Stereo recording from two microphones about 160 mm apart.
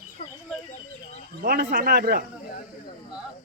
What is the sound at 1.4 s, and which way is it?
Speech, 75° right (ahead or behind).